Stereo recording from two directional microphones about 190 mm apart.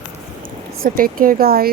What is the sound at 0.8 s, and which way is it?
Speech, 50° right (ahead or behind).